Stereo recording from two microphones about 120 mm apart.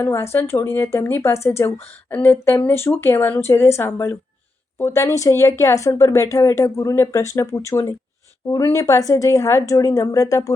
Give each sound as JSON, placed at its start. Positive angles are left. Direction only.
{"t": 0.0, "sound": "speech", "side_deg": 20}